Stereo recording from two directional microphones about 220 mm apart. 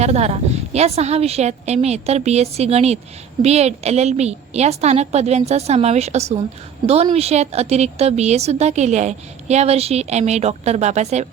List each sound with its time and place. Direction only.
0.0 s a woman's voice: 30° right (ahead or behind)